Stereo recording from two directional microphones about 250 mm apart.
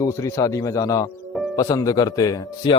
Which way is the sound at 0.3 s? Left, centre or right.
Centre.